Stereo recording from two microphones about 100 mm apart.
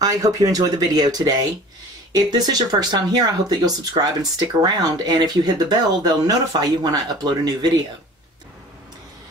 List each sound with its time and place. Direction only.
0.0 s speech: 35° right (ahead or behind)